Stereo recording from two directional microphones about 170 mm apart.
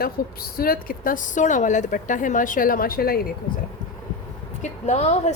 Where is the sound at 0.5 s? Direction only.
60° left (ahead or behind).